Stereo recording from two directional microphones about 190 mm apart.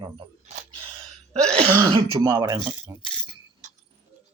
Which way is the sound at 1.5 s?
30° right (ahead or behind).